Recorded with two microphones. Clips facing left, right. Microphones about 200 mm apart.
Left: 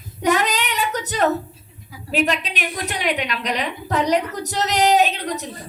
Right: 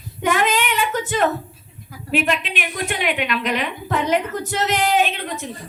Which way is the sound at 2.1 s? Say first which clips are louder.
Even; 40° left (ahead or behind).